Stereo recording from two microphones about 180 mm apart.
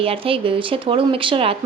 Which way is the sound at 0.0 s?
30° right (ahead or behind).